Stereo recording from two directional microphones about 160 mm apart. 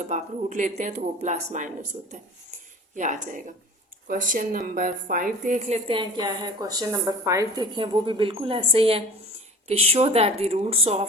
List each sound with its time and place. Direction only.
0.1 s speech: 50° right (ahead or behind)
6.0 s a woman's voice: 25° right (ahead or behind)